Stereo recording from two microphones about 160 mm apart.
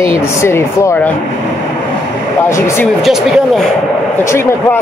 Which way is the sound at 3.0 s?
Centre (ahead or behind).